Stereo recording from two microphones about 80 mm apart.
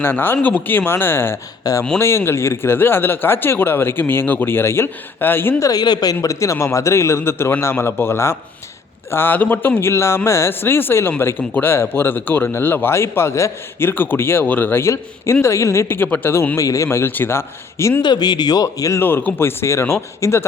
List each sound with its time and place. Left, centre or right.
0.0 s a man's voice: left
1.7 s a man's voice: left
2.0 s a man's voice: left
5.5 s a man's voice: left
5.8 s a man's voice: left
16.6 s a man's voice: left
18.0 s speech: left
18.9 s a man's voice: left